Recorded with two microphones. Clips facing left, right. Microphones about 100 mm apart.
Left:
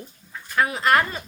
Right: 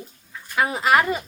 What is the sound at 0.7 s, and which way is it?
Speech, 10° right (ahead or behind).